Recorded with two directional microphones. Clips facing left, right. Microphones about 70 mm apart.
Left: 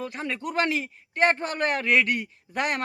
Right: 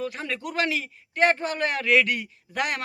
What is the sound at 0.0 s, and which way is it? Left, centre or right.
Speech, left.